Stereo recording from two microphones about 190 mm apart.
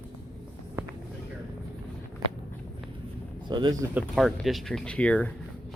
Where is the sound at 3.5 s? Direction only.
25° right (ahead or behind).